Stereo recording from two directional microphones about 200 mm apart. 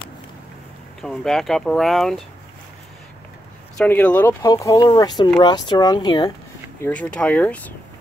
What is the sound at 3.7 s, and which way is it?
Speech, 5° left (ahead or behind).